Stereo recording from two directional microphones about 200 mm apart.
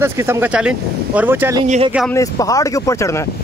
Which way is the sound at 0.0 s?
10° right (ahead or behind).